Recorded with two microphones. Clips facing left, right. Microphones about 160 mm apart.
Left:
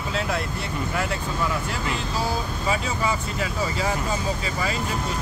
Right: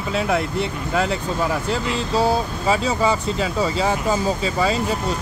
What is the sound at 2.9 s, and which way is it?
Speech, 30° right (ahead or behind).